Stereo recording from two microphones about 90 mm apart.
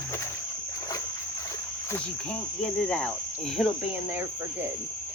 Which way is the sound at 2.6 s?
10° left (ahead or behind).